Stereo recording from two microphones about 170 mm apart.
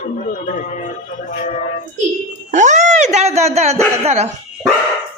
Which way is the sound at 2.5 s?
45° right (ahead or behind).